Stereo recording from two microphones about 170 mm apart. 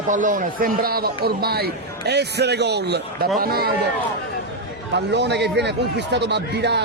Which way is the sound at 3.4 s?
65° right (ahead or behind).